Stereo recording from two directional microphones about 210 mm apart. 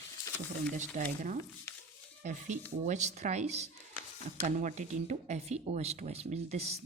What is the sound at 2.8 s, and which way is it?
Speech, 35° right (ahead or behind).